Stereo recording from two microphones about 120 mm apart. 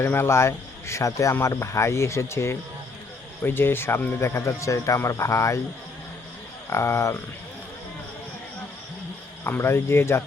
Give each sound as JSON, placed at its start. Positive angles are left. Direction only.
{"t": 0.0, "sound": "speech", "side_deg": 20}
{"t": 6.7, "sound": "speech", "side_deg": 25}
{"t": 9.4, "sound": "speech", "side_deg": 20}